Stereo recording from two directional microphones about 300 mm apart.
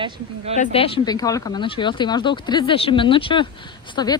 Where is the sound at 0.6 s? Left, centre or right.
Centre.